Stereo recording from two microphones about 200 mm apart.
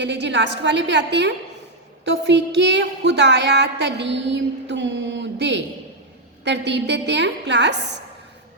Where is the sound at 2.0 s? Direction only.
60° right (ahead or behind).